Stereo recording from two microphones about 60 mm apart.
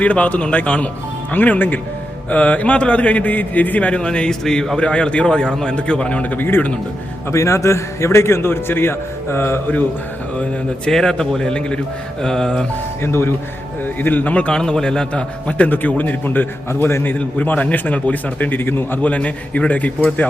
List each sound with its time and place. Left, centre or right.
0.0 s a man's voice: left; by 4.8 s centre
4.8 s a man's voice: centre
7.3 s a man's voice: left
10.8 s a man's voice: centre
13.0 s a man's voice: left
14.5 s a man's voice: centre; by 18.9 s left
19.0 s a man's voice: left